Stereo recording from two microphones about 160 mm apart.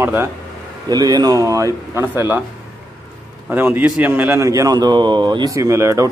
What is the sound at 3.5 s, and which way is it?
A man's voice, 10° right (ahead or behind).